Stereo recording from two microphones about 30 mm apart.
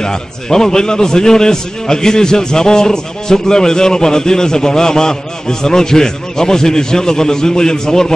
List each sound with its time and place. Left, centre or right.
0.0 s a man's voice: left